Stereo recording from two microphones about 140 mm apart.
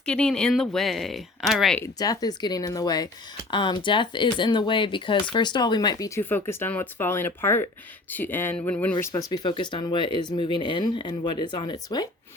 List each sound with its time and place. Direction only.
0.0 s speech: 5° left (ahead or behind)
1.8 s speech: 25° left (ahead or behind); by 9.0 s 10° left (ahead or behind)
9.1 s speech: 30° left (ahead or behind)